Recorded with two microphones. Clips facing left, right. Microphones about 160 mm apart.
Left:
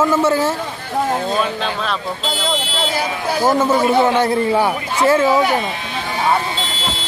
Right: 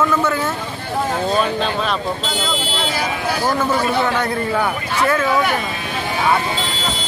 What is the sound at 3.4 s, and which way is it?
A man's voice, 20° left (ahead or behind).